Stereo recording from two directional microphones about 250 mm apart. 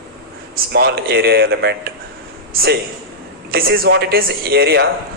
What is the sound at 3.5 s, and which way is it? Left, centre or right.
Speech, right.